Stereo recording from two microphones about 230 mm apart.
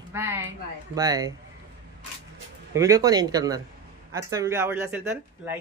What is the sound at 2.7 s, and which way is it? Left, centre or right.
A woman's voice, centre.